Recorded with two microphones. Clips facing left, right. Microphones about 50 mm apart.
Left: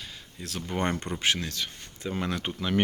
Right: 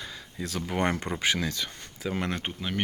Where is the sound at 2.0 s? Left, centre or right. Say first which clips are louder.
Right 1 dB; right.